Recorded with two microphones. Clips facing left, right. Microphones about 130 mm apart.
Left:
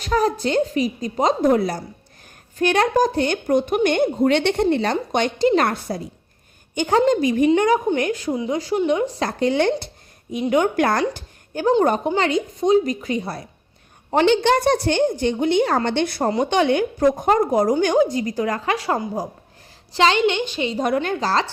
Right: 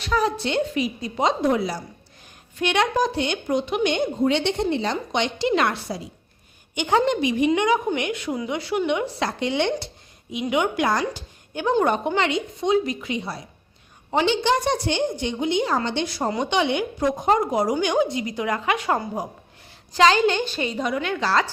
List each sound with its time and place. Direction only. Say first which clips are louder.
0.0 s a woman's voice: left 3 dB; 45° left (ahead or behind)
6.7 s a woman's voice: left 3 dB; 40° left (ahead or behind)
11.9 s a woman's voice: left 2 dB; 40° left (ahead or behind); by 16.3 s 55° left (ahead or behind)
16.5 s a woman's voice: left 4 dB; 45° left (ahead or behind); by 20.7 s 20° left (ahead or behind)
20.8 s a woman's voice: left 4 dB; 50° left (ahead or behind)